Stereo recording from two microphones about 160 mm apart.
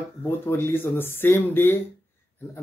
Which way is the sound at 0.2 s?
15° left (ahead or behind).